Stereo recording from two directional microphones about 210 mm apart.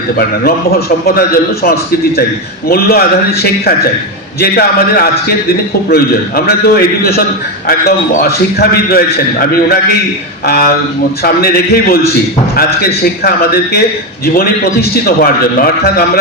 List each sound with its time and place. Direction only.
1.6 s a man's voice: 45° left (ahead or behind)